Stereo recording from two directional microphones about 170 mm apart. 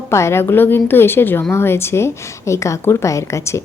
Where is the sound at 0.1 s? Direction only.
15° left (ahead or behind).